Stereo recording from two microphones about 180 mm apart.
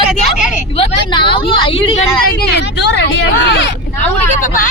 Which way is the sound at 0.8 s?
30° left (ahead or behind).